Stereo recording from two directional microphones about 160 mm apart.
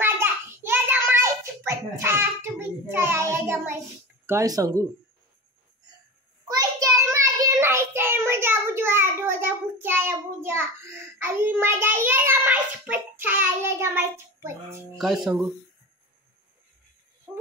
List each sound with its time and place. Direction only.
0.0 s child singing: 15° right (ahead or behind)
4.3 s speech: 20° right (ahead or behind)
6.5 s child singing: 20° right (ahead or behind)